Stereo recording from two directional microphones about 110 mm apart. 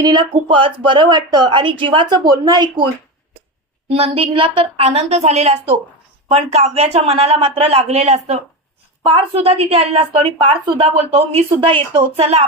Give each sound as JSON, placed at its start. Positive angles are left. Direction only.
{"t": 0.0, "sound": "speech", "side_deg": -40}
{"t": 1.5, "sound": "a woman's voice", "side_deg": -50}
{"t": 3.8, "sound": "a woman's voice", "side_deg": -65}
{"t": 4.9, "sound": "a woman's voice", "side_deg": -80}
{"t": 9.0, "sound": "a woman's voice", "side_deg": -60}
{"t": 11.1, "sound": "a woman's voice", "side_deg": -65}